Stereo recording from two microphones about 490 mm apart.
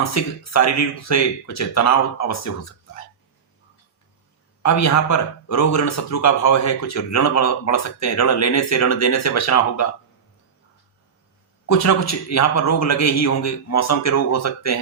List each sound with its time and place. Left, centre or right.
0.0 s a man's voice: left
4.6 s a man's voice: left
11.7 s a man's voice: left